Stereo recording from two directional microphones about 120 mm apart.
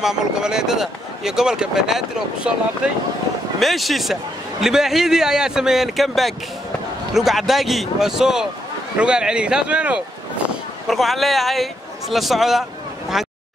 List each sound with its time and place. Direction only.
0.0 s a man's voice: 5° right (ahead or behind)
13.1 s vehicle: 5° right (ahead or behind)